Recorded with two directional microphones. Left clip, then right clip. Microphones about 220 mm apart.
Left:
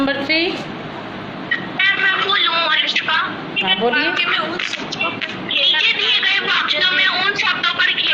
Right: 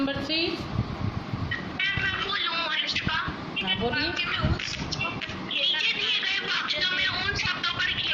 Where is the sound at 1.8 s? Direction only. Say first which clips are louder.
Left 12 dB; 20° left (ahead or behind).